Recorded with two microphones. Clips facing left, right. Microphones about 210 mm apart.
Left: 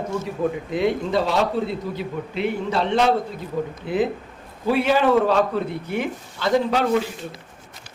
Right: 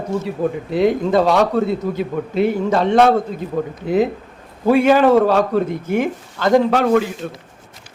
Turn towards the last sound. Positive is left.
turn(degrees=-55)  # may be behind; listen again after turning